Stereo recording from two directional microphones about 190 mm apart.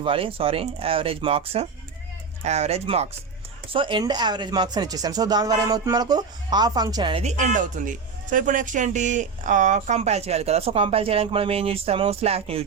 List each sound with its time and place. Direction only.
0.0 s speech: 30° right (ahead or behind)